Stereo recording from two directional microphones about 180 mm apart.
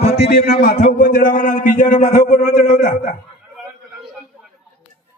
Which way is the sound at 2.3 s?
45° left (ahead or behind).